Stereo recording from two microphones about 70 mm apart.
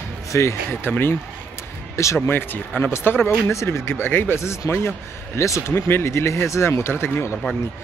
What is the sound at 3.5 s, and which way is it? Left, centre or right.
Speech, left.